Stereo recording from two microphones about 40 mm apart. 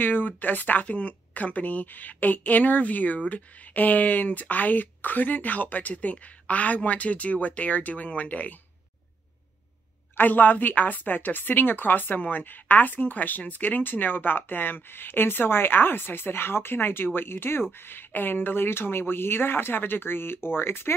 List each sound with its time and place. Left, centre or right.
0.0 s a woman's voice: left
10.1 s a woman's voice: left